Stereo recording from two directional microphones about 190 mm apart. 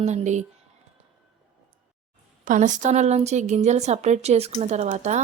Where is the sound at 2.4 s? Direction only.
40° right (ahead or behind).